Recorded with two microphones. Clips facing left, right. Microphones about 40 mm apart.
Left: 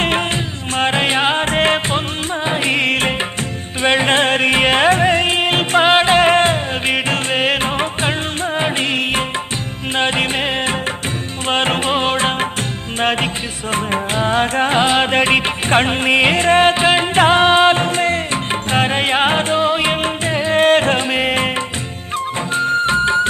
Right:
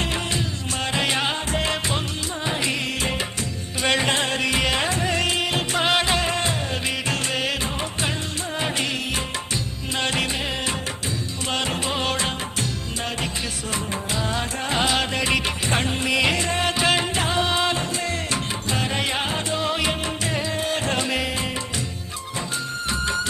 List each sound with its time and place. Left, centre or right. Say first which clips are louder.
0.8 s music: left 8 dB; left
3.8 s music: left 6 dB; left
4.1 s music: left 8 dB; left
13.7 s music: left 10 dB; left
14.8 s music: left 7 dB; left
17.2 s music: left 11 dB; left
19.6 s music: left 8 dB; left
20.6 s music: left 15 dB; left
22.5 s music: left 14 dB; left